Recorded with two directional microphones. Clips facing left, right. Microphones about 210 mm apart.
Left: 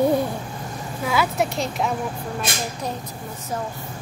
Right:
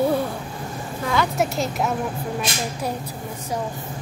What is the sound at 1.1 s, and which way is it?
Speech, 5° left (ahead or behind).